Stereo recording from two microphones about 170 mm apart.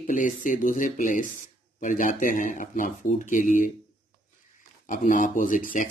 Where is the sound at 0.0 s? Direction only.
50° left (ahead or behind).